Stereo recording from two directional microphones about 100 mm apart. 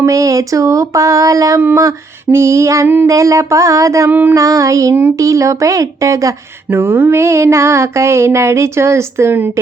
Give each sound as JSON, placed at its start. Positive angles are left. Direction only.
{"t": 0.0, "sound": "speech", "side_deg": -35}
{"t": 1.6, "sound": "mantra", "side_deg": -30}
{"t": 3.1, "sound": "speech", "side_deg": -30}
{"t": 4.1, "sound": "mantra", "side_deg": -20}
{"t": 4.4, "sound": "speech", "side_deg": -35}
{"t": 6.7, "sound": "mantra", "side_deg": -20}